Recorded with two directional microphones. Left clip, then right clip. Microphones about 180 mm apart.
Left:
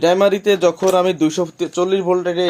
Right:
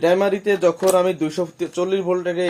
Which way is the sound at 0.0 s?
50° left (ahead or behind).